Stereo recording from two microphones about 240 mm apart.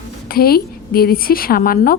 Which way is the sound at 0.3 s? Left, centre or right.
Left.